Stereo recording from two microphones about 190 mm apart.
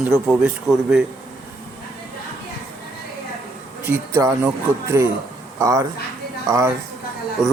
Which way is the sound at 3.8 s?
15° right (ahead or behind).